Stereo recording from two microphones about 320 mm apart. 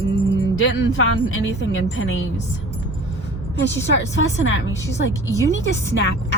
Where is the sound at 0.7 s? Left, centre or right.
Left.